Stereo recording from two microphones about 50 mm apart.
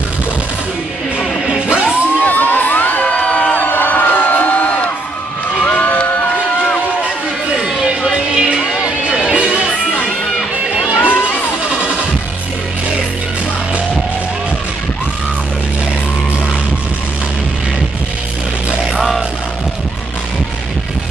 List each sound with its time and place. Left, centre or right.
1.5 s music: right
2.2 s crowd: left
3.0 s crowd: left
3.6 s a sound: left
7.5 s music: centre
9.3 s music: right
11.0 s crowd: left
18.9 s music: centre